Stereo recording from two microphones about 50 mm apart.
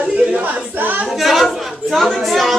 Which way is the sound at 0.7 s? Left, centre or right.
Right.